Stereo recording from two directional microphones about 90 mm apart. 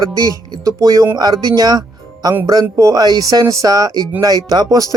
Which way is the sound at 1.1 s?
45° right (ahead or behind).